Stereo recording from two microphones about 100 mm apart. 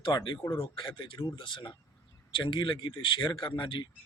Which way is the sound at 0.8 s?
60° left (ahead or behind).